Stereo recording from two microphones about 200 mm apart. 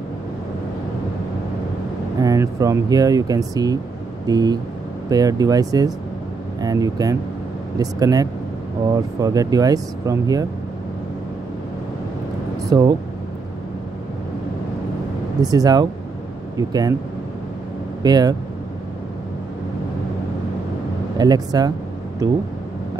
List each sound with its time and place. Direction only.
2.1 s speech: 15° right (ahead or behind)
12.6 s speech: 20° right (ahead or behind)
15.4 s speech: 20° right (ahead or behind)
18.0 s speech: 20° right (ahead or behind)
21.2 s speech: 20° right (ahead or behind)